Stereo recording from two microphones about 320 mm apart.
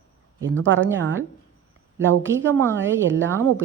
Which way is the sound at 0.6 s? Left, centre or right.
Right.